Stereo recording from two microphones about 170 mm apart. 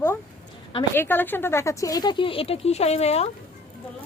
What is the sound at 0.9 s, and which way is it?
Speech, 10° left (ahead or behind).